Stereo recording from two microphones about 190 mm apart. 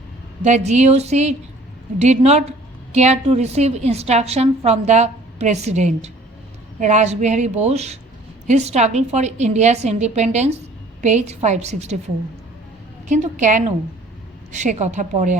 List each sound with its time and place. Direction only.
0.4 s a woman's voice: 35° right (ahead or behind)
13.1 s a woman's voice: 40° right (ahead or behind)